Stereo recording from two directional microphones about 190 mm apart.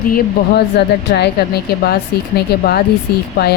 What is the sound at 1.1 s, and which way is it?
A woman's voice, 60° left (ahead or behind).